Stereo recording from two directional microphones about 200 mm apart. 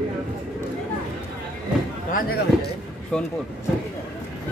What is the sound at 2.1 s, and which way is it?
Speech, 45° left (ahead or behind).